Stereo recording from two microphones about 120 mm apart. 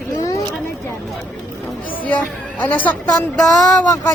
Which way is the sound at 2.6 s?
15° left (ahead or behind).